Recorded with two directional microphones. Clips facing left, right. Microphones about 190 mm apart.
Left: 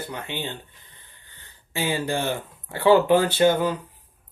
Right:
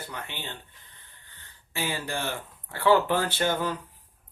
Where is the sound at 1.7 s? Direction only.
20° left (ahead or behind).